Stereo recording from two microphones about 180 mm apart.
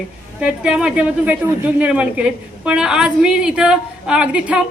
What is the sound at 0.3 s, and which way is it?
A man's voice, 5° right (ahead or behind).